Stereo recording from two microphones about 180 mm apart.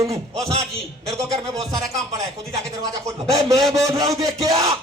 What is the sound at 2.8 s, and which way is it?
Speech, 20° right (ahead or behind).